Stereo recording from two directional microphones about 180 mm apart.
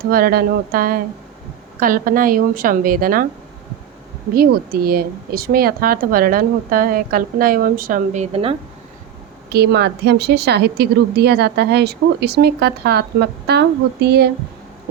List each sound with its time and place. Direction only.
0.1 s a woman's voice: 55° right (ahead or behind)
4.4 s speech: 55° right (ahead or behind); by 8.5 s 35° right (ahead or behind)
9.5 s a woman's voice: 65° right (ahead or behind)